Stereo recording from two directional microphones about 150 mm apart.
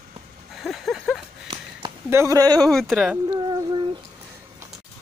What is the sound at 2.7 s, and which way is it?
Speech, centre (ahead or behind).